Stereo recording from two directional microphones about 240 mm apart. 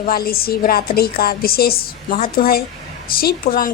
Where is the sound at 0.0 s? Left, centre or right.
Left.